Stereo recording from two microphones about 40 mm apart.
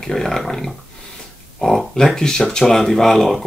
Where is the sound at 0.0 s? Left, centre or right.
Centre.